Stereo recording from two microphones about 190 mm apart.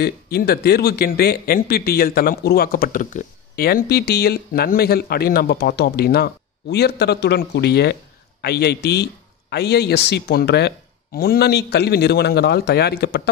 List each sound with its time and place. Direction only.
0.0 s speech: 55° left (ahead or behind)